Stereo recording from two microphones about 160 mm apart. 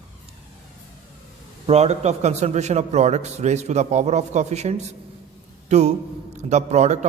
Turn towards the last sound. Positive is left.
turn(degrees=-45)  # may be behind; listen again after turning